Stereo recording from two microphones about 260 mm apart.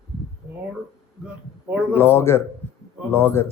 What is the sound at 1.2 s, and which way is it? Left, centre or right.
Speech, centre.